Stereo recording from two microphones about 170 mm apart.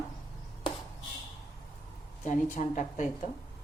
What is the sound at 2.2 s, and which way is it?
A woman's voice, 50° left (ahead or behind).